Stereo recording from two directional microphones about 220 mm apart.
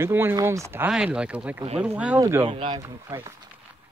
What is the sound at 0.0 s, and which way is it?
Speech, 10° right (ahead or behind).